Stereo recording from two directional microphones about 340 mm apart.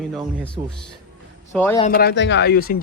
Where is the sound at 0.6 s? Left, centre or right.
Centre.